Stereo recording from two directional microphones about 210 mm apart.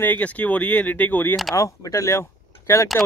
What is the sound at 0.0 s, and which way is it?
Speech, 5° left (ahead or behind).